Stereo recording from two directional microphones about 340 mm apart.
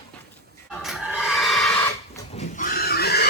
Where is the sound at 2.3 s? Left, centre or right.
Left.